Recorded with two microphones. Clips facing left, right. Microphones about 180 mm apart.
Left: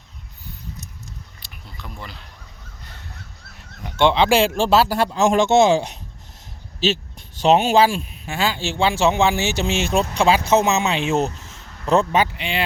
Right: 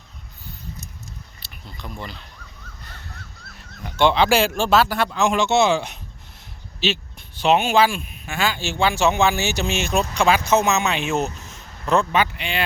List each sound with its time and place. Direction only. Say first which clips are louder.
1.4 s speech: right 4 dB; 5° left (ahead or behind)
3.6 s speech: left 1 dB; 20° left (ahead or behind)
5.1 s chopping: left 4 dB; 40° left (ahead or behind)
6.7 s speech: left 3 dB; 40° left (ahead or behind)
12.3 s speech: left 1 dB; 25° left (ahead or behind)